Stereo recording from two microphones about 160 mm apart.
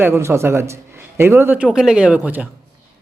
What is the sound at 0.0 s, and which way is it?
A man's voice, 15° right (ahead or behind).